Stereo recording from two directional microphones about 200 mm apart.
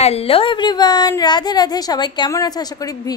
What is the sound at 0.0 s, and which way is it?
A woman's voice, 30° left (ahead or behind).